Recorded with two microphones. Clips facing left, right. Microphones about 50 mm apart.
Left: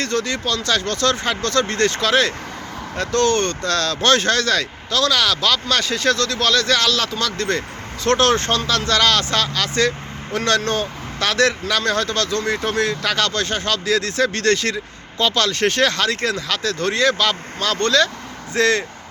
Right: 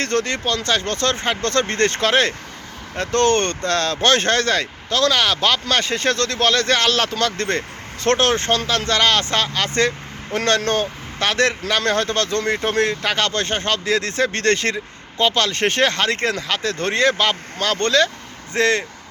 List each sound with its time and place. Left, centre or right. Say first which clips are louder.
0.0 s speech: right 1 dB; right
0.4 s speech: even; right
3.7 s speech: even; right
8.2 s speech: left 1 dB; right
10.3 s speech: right 1 dB; right
11.2 s speech: left 1 dB; right
11.8 s speech: right 2 dB; right